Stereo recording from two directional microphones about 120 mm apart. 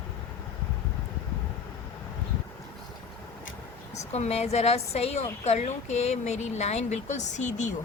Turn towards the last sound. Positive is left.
turn(degrees=85)